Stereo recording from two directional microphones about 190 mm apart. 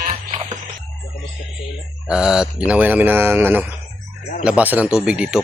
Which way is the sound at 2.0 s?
5° right (ahead or behind).